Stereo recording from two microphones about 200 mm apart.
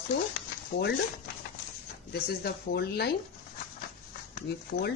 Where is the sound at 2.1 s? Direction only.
50° left (ahead or behind).